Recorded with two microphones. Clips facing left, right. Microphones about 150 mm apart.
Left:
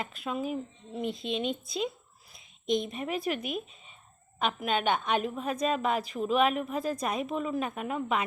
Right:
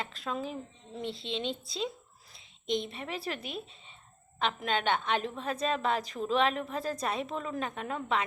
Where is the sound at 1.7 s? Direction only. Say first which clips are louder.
Left 3 dB; 15° left (ahead or behind).